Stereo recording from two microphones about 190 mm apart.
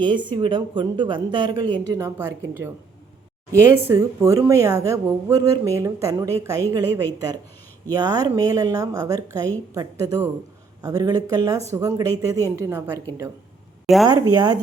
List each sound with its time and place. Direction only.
0.0 s speech: 25° right (ahead or behind)
3.5 s a woman's voice: 15° right (ahead or behind)
13.8 s speech: centre (ahead or behind)
14.1 s speech: 20° right (ahead or behind)